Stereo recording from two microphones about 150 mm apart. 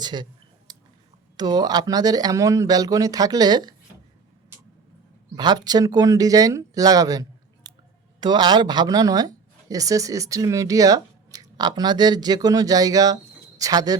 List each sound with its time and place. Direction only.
0.0 s speech: 30° right (ahead or behind)
0.7 s a sound: 30° right (ahead or behind)
1.4 s speech: 25° right (ahead or behind)
5.4 s speech: 25° right (ahead or behind)